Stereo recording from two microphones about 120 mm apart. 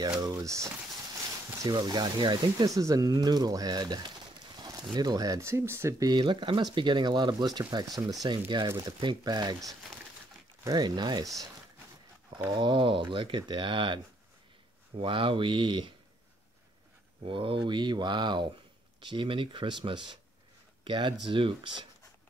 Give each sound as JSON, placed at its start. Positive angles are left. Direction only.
{"t": 0.2, "sound": "speech", "side_deg": -30}
{"t": 10.6, "sound": "speech", "side_deg": -35}
{"t": 12.4, "sound": "speech", "side_deg": -40}
{"t": 17.2, "sound": "speech", "side_deg": -45}